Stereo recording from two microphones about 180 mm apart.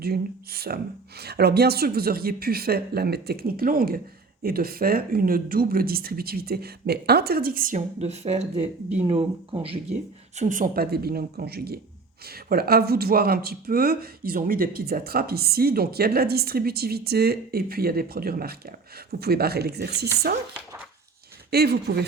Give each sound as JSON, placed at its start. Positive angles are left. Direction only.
{"t": 0.0, "sound": "speech", "side_deg": -60}
{"t": 21.5, "sound": "speech", "side_deg": -60}